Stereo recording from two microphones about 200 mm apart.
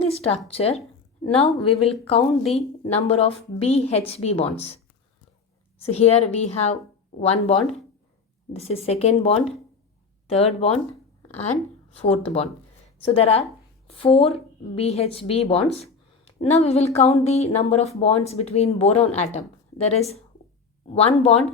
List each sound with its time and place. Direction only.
0.0 s a woman's voice: 30° left (ahead or behind)
2.4 s speech: centre (ahead or behind)
2.8 s a woman's voice: 30° left (ahead or behind)
5.8 s a woman's voice: 30° left (ahead or behind)
7.2 s a woman's voice: 30° left (ahead or behind)
12.0 s a woman's voice: 30° left (ahead or behind)